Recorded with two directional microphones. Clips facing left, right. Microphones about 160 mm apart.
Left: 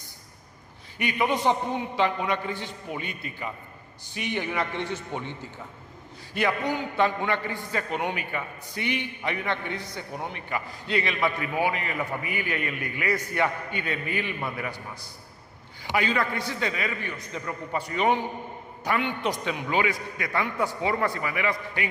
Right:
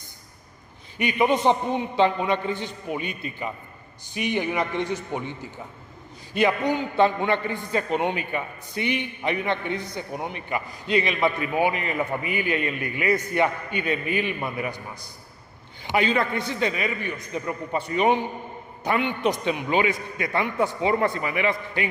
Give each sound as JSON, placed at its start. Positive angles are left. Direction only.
{"t": 0.9, "sound": "a man's voice", "side_deg": -20}
{"t": 6.3, "sound": "a man's voice", "side_deg": -20}